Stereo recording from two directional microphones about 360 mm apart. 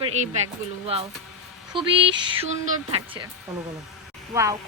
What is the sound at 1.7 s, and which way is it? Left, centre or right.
Speech, centre.